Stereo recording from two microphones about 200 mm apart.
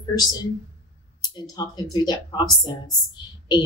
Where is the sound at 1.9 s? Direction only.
20° left (ahead or behind).